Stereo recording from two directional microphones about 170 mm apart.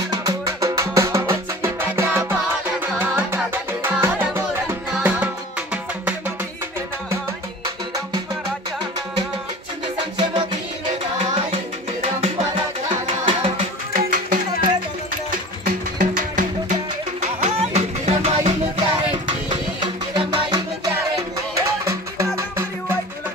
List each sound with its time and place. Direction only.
0.1 s music: 20° right (ahead or behind)
11.5 s tabla: 35° right (ahead or behind)
13.0 s music: 30° right (ahead or behind)
13.9 s music: 55° right (ahead or behind)
17.2 s music: 40° right (ahead or behind)
20.2 s music: 20° right (ahead or behind)